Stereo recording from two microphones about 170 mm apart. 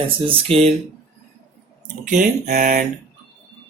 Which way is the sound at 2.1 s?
45° right (ahead or behind).